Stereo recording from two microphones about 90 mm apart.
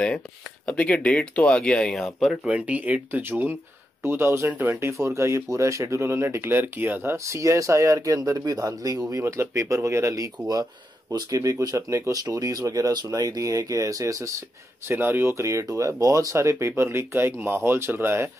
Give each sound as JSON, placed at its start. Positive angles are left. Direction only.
{"t": 0.7, "sound": "speech", "side_deg": 15}
{"t": 2.4, "sound": "speech", "side_deg": -15}
{"t": 10.5, "sound": "speech", "side_deg": -45}
{"t": 14.9, "sound": "speech", "side_deg": -25}